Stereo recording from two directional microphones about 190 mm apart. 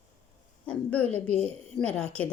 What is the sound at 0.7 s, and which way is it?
Speech, 5° left (ahead or behind).